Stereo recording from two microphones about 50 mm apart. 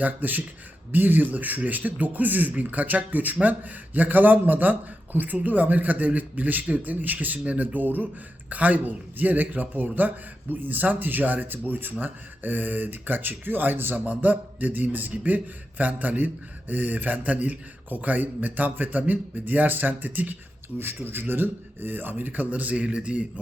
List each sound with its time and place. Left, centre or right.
0.0 s speech: right
20.7 s speech: right